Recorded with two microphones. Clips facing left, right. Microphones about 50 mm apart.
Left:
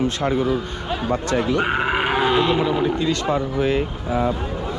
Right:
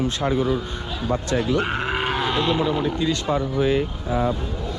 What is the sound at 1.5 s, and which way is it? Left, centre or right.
Speech, centre.